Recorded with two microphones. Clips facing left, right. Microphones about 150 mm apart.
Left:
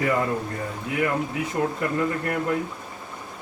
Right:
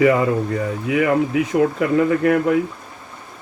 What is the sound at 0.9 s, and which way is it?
Speech, 90° right.